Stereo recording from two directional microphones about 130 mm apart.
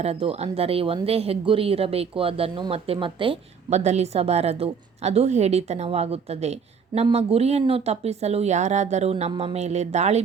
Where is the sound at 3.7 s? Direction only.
60° right (ahead or behind).